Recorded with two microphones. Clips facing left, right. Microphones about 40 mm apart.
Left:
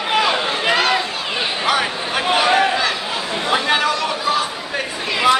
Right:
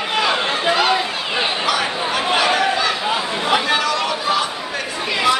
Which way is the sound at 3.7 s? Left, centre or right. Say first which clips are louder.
Left 1 dB; centre.